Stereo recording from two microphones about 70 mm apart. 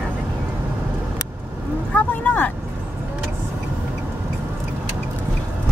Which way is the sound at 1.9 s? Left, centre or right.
Left.